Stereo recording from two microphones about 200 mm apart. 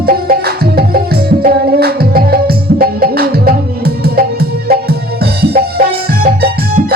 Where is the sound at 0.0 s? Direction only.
50° right (ahead or behind).